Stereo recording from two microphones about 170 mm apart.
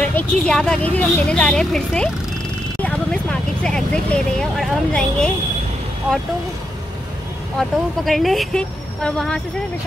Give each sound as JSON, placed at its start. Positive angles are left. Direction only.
{"t": 0.0, "sound": "a woman's voice", "side_deg": 5}
{"t": 7.5, "sound": "a woman's voice", "side_deg": 0}